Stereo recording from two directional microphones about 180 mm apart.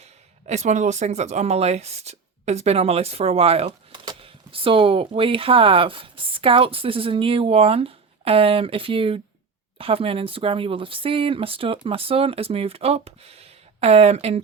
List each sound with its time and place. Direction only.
0.0 s speech: 40° right (ahead or behind)